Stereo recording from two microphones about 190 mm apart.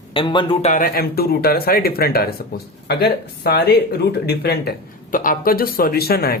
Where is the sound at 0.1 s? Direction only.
25° left (ahead or behind).